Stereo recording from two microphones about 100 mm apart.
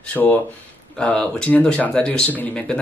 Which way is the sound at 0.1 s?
15° left (ahead or behind).